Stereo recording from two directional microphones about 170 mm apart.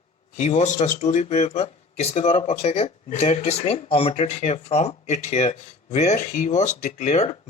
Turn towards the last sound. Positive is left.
turn(degrees=40)  # may be behind; listen again after turning